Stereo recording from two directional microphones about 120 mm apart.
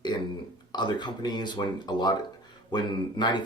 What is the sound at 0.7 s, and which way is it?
Speech, 35° left (ahead or behind).